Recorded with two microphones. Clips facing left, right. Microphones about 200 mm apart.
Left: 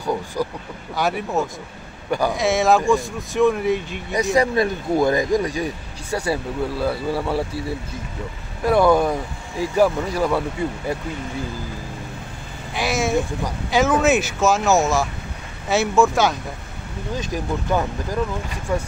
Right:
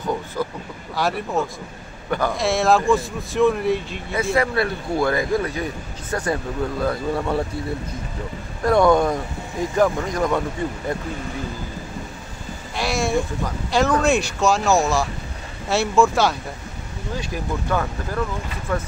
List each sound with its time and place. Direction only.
0.4 s speech: 15° left (ahead or behind)
0.9 s speech: centre (ahead or behind)
2.0 s a man's voice: 10° left (ahead or behind)
2.3 s speech: centre (ahead or behind)
4.1 s speech: 15° left (ahead or behind)
8.6 s speech: 5° left (ahead or behind)
12.7 s a sound: centre (ahead or behind)
13.7 s speech: 5° left (ahead or behind)
17.2 s speech: 15° left (ahead or behind)